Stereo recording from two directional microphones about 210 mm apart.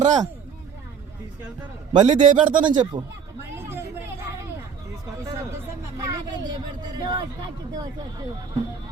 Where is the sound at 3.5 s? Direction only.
10° right (ahead or behind).